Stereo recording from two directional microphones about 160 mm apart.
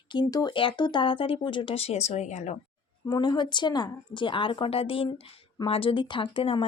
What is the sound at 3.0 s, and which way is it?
Speech, 30° left (ahead or behind).